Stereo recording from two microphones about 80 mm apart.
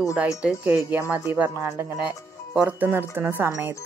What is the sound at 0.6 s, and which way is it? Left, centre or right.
Speech, right.